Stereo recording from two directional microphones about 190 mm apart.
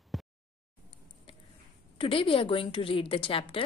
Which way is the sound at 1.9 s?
25° left (ahead or behind).